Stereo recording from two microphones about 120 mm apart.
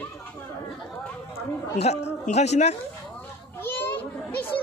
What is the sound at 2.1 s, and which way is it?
Speech, 65° left (ahead or behind).